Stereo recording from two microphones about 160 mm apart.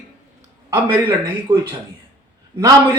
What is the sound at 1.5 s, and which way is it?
Speech, 30° right (ahead or behind).